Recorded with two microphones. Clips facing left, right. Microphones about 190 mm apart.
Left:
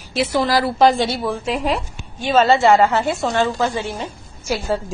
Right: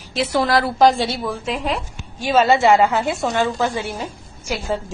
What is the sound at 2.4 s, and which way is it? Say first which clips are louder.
A woman's voice: left 1 dB; 20° right (ahead or behind).